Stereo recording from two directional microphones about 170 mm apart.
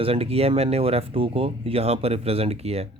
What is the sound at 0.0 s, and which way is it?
Speech, 35° right (ahead or behind).